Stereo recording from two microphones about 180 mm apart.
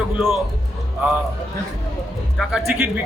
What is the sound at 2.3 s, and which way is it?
Speech, centre (ahead or behind).